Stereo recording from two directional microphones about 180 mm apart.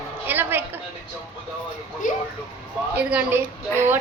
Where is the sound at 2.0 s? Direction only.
45° left (ahead or behind).